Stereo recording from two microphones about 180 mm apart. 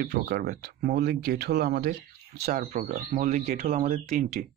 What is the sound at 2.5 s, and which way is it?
Speech, 40° right (ahead or behind).